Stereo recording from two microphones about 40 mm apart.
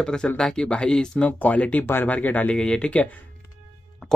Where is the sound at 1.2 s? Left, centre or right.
Left.